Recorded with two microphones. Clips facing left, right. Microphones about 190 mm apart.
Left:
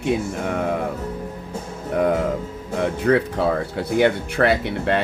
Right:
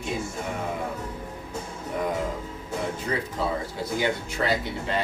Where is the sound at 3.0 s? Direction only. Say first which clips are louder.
Left 10 dB; 65° left (ahead or behind).